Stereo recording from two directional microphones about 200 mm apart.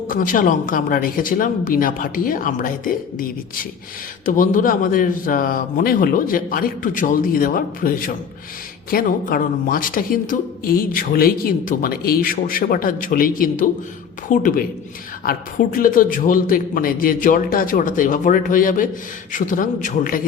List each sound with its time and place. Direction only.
0.1 s a woman's voice: 45° left (ahead or behind)